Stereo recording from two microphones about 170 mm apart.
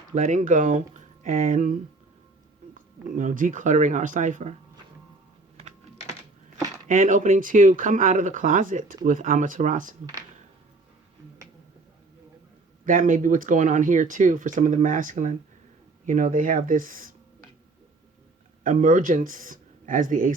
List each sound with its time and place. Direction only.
0.1 s speech: 50° right (ahead or behind)
6.8 s speech: 50° right (ahead or behind)
12.8 s speech: 50° right (ahead or behind)
18.6 s speech: 50° right (ahead or behind)